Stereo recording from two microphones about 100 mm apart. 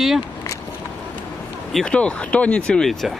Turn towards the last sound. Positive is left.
turn(degrees=5)  # may be behind; listen again after turning